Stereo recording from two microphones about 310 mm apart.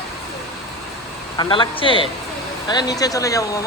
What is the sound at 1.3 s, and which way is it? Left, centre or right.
Speech, centre.